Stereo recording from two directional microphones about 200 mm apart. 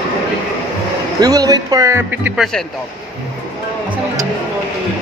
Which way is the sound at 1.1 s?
20° right (ahead or behind).